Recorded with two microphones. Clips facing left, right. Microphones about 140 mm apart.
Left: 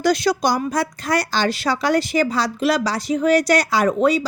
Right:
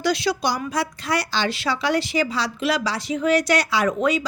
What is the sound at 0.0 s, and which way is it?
A woman's voice, 45° left (ahead or behind).